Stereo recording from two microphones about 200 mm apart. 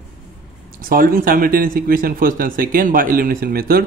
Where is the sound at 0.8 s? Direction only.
45° right (ahead or behind).